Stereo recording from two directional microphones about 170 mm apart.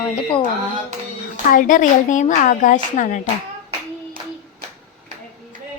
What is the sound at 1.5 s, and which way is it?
A woman's voice, 50° left (ahead or behind).